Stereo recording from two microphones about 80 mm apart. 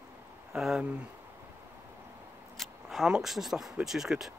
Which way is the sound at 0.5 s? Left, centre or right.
Centre.